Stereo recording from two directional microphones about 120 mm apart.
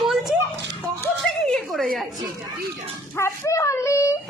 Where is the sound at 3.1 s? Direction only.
20° left (ahead or behind).